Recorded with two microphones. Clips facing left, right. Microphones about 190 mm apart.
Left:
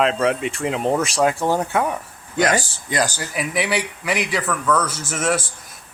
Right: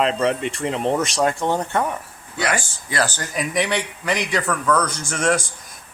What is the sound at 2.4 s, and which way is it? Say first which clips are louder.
Speech: left 5 dB; 40° left (ahead or behind).